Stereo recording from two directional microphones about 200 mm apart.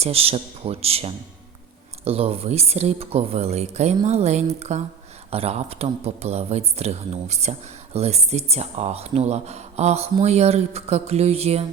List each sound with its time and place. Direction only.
0.0 s speech: 30° right (ahead or behind)